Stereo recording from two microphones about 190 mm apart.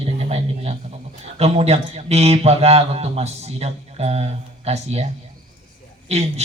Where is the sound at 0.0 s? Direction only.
30° right (ahead or behind).